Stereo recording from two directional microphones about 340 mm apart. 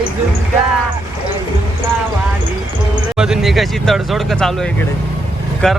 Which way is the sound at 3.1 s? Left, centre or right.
Centre.